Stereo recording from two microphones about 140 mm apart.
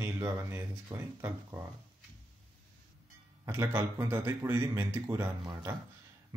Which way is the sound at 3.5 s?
20° right (ahead or behind).